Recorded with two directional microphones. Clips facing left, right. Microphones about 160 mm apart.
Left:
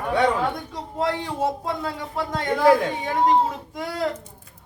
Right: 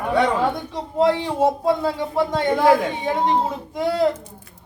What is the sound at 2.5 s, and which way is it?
Speech, 5° right (ahead or behind).